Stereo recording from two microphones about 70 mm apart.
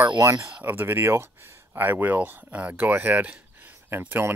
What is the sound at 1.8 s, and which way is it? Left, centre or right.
Speech, right.